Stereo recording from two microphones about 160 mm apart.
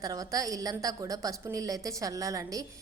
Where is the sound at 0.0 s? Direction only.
20° right (ahead or behind).